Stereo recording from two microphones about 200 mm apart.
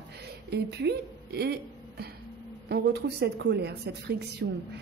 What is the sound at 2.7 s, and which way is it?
Speech, 55° right (ahead or behind).